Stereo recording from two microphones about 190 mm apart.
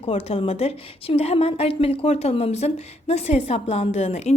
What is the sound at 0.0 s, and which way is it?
A woman's voice, 30° left (ahead or behind).